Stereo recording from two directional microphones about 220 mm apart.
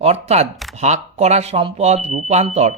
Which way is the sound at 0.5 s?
Centre (ahead or behind).